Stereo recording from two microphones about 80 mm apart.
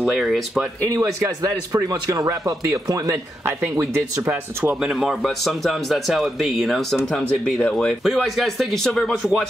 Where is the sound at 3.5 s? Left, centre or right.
Right.